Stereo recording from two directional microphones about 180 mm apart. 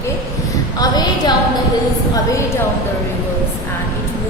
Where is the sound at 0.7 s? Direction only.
20° left (ahead or behind).